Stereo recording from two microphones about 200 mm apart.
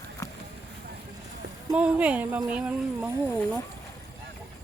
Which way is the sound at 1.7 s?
5° right (ahead or behind).